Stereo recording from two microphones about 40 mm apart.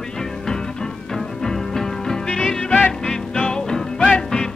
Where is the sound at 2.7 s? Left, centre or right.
Left.